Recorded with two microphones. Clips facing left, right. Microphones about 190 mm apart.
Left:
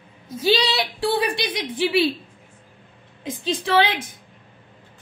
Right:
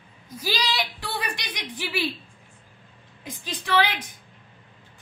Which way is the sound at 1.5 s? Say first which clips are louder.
Left 9 dB; 25° left (ahead or behind).